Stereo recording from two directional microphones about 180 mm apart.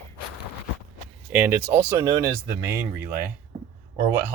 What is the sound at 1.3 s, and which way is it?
Speech, 10° right (ahead or behind).